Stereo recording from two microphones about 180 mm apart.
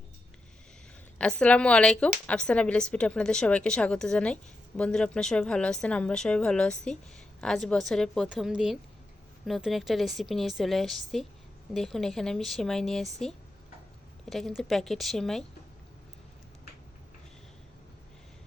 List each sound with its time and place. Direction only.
1.2 s speech: 5° left (ahead or behind)